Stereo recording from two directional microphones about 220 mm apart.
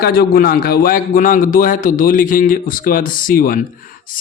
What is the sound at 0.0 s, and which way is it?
A man's voice, 45° left (ahead or behind).